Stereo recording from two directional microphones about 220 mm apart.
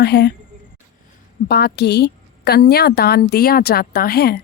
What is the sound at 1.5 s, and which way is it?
A woman's voice, 45° left (ahead or behind).